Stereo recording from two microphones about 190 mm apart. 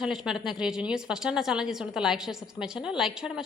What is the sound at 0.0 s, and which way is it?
A woman's voice, centre (ahead or behind).